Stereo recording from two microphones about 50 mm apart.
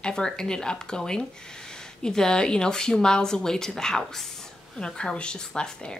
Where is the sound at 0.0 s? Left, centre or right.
Centre.